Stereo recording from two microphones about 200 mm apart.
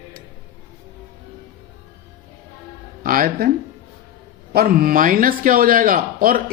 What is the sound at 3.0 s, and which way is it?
Speech, 45° right (ahead or behind).